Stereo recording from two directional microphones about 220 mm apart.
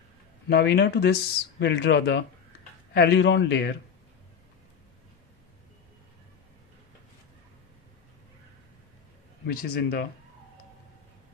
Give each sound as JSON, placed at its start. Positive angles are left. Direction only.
{"t": 0.5, "sound": "a man's voice", "side_deg": 45}
{"t": 9.5, "sound": "a man's voice", "side_deg": 40}